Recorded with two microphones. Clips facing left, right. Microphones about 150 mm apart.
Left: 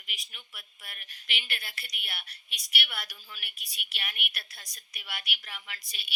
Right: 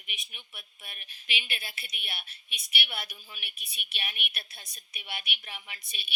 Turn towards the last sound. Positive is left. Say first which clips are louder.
# even
turn(degrees=-25)  # may be behind; listen again after turning